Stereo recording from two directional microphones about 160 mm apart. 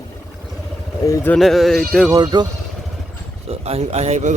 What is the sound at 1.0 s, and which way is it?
Speech, 20° left (ahead or behind).